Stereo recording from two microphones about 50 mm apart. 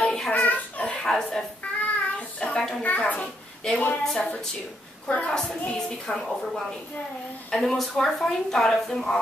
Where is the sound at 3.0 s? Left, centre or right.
Left.